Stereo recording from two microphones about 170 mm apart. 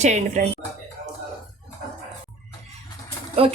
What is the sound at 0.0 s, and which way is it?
Speech, 45° right (ahead or behind).